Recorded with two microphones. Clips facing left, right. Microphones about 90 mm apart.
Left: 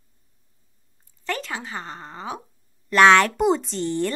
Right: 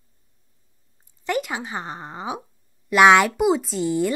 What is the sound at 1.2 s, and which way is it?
Speech, 15° right (ahead or behind).